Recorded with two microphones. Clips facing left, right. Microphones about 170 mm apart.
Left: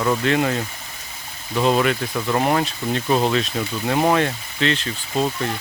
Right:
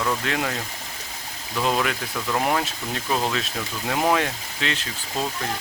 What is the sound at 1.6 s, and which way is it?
Speech, 5° left (ahead or behind).